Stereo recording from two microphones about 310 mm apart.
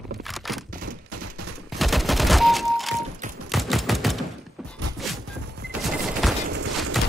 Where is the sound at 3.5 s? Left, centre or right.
Centre.